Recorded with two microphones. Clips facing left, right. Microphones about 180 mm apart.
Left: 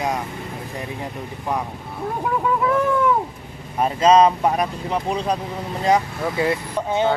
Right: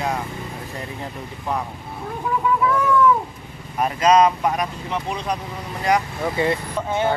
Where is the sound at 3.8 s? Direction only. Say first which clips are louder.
Left 2 dB; 30° left (ahead or behind).